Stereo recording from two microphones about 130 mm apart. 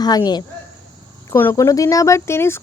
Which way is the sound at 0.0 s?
30° left (ahead or behind).